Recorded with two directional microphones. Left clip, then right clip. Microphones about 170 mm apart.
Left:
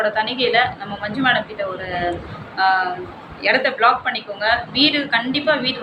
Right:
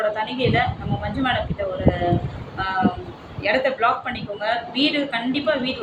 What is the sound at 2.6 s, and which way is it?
A woman's voice, 20° right (ahead or behind).